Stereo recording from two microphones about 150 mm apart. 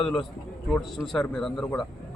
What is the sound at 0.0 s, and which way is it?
A man's voice, centre (ahead or behind).